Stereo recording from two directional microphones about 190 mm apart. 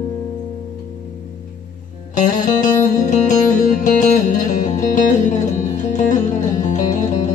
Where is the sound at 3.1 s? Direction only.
40° left (ahead or behind).